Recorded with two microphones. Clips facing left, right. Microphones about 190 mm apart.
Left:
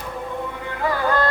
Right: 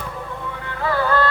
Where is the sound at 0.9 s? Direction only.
15° left (ahead or behind).